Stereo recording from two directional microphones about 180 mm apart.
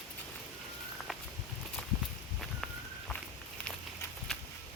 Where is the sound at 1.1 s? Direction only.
Centre (ahead or behind).